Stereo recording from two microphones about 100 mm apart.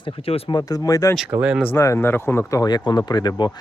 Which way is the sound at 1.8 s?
25° left (ahead or behind).